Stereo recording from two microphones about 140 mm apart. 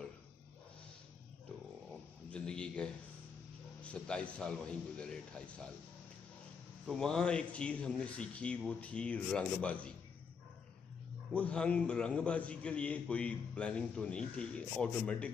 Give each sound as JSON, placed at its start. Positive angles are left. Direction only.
{"t": 2.3, "sound": "a sound", "side_deg": 5}
{"t": 3.8, "sound": "a man's voice", "side_deg": 10}
{"t": 6.9, "sound": "a man's voice", "side_deg": 5}
{"t": 11.3, "sound": "a man's voice", "side_deg": 10}